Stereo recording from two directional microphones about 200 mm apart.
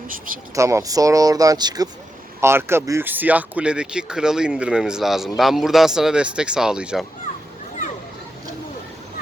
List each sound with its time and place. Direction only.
0.5 s speech: 15° right (ahead or behind)